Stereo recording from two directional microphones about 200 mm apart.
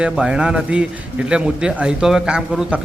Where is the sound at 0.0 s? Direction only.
5° right (ahead or behind).